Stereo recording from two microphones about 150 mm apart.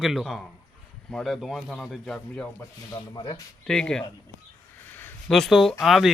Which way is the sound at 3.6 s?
5° left (ahead or behind).